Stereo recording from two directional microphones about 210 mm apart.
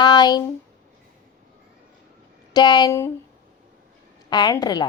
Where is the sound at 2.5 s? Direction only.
20° left (ahead or behind).